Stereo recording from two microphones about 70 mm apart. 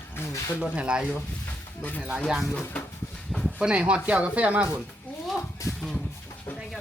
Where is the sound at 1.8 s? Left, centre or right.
Left.